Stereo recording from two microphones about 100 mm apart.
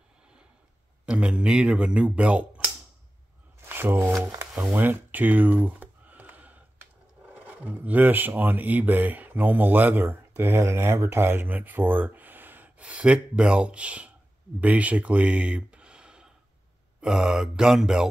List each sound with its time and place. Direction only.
1.0 s speech: 10° right (ahead or behind)
3.6 s a sound: 20° right (ahead or behind)
7.4 s speech: 15° right (ahead or behind)